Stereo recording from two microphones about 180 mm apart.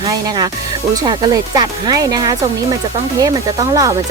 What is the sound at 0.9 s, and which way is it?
Speech, 20° right (ahead or behind).